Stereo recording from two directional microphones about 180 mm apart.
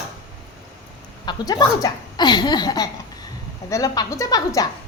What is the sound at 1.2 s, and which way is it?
A woman's voice, 20° left (ahead or behind).